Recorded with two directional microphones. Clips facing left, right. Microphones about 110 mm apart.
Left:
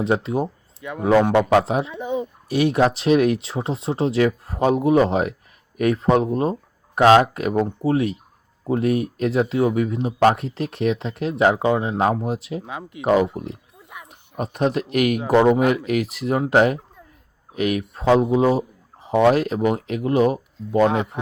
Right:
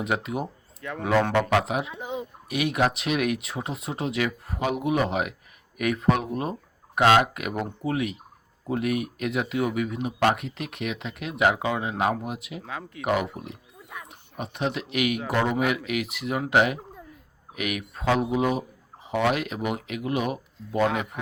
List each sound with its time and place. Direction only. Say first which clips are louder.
0.0 s speech: left 7 dB; 30° left (ahead or behind)
0.8 s a man's voice: left 6 dB; 15° left (ahead or behind)
1.5 s speech: left 6 dB; 35° left (ahead or behind)
12.6 s speech: left 3 dB; 20° left (ahead or behind)
13.3 s speech: left 7 dB; 35° left (ahead or behind)